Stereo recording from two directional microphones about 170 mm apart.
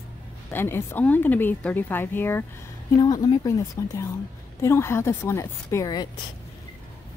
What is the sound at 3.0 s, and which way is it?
A woman's voice, 25° left (ahead or behind).